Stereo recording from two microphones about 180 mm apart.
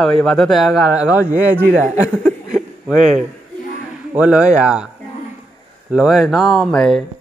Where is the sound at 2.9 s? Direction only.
45° right (ahead or behind).